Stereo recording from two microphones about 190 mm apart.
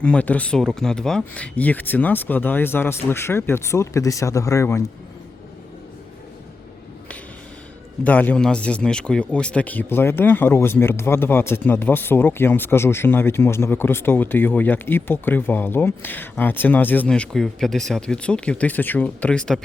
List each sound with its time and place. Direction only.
0.0 s speech: 5° left (ahead or behind)
8.0 s speech: 10° left (ahead or behind)